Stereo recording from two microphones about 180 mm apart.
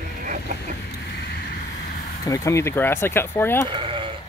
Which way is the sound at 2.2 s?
20° left (ahead or behind).